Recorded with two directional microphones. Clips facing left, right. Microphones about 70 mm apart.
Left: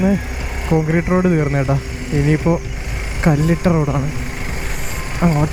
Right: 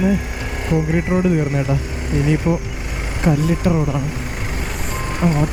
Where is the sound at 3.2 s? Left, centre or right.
Left.